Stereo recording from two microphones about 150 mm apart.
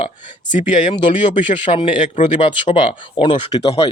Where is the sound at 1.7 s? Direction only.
35° left (ahead or behind).